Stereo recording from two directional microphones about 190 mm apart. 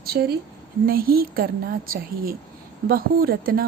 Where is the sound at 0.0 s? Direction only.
55° right (ahead or behind).